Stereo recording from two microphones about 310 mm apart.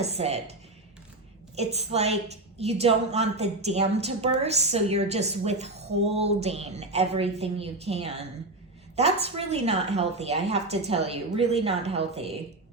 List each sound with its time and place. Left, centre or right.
0.0 s a woman's voice: centre
1.5 s a woman's voice: centre